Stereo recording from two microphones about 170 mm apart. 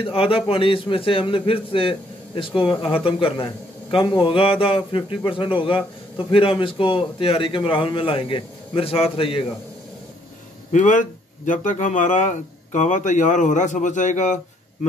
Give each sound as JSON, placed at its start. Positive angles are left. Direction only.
{"t": 0.0, "sound": "a man's voice", "side_deg": 35}
{"t": 10.7, "sound": "speech", "side_deg": 50}